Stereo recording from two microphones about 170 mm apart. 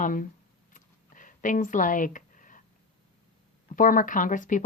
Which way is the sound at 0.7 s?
50° left (ahead or behind).